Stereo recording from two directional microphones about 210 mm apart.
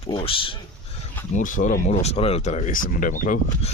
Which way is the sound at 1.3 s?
35° left (ahead or behind).